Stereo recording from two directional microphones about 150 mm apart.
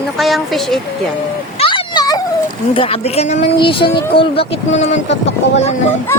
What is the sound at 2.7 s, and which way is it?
Speech, 40° left (ahead or behind).